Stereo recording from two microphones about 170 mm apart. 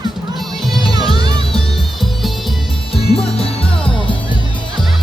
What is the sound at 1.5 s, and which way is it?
Music, centre (ahead or behind).